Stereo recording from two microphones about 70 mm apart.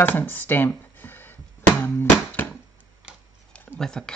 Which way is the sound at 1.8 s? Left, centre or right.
Left.